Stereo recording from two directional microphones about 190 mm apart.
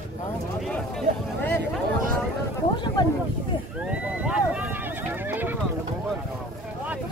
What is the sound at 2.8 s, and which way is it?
Speech, 20° left (ahead or behind).